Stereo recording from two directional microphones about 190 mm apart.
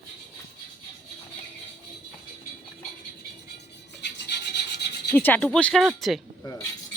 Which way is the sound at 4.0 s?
60° left (ahead or behind).